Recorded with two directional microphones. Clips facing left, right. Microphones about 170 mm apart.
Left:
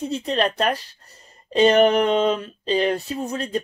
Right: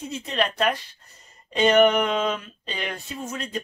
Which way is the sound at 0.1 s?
35° left (ahead or behind).